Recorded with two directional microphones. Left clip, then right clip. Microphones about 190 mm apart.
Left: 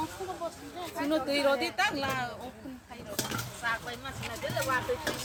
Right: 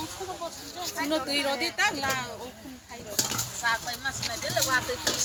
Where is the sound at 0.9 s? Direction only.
55° left (ahead or behind).